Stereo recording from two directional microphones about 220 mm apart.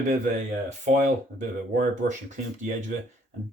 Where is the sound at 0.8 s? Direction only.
35° right (ahead or behind).